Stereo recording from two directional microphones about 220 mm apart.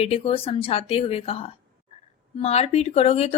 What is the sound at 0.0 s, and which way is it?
A woman's voice, 25° left (ahead or behind).